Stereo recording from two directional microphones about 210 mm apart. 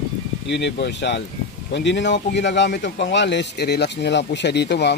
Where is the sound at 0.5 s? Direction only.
55° left (ahead or behind).